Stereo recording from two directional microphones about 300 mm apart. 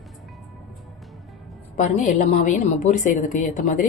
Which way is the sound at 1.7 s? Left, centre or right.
Left.